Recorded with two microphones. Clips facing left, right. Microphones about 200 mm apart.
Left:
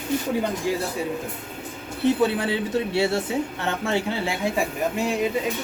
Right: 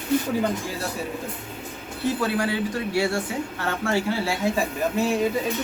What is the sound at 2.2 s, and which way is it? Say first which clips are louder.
Speech: left 2 dB; 25° left (ahead or behind).